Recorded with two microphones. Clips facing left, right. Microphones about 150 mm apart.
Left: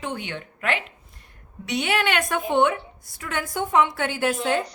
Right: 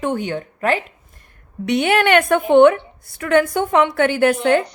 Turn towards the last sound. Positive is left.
turn(degrees=-65)  # may be behind; listen again after turning